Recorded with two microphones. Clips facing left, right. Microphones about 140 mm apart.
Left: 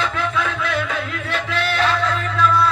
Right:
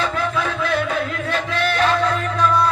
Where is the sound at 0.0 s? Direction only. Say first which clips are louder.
Right 1 dB; 35° right (ahead or behind).